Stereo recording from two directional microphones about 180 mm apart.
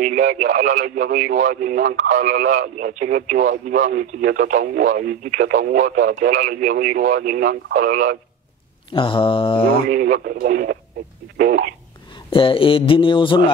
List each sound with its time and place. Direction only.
0.0 s speech: 50° right (ahead or behind)
8.9 s mantra: 30° left (ahead or behind)
9.8 s speech: 50° right (ahead or behind)
12.3 s speech: 30° left (ahead or behind)